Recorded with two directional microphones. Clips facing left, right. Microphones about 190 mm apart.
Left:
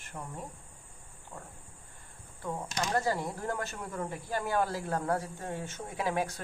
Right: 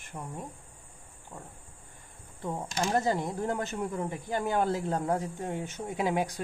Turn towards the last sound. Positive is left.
turn(degrees=-15)  # may be behind; listen again after turning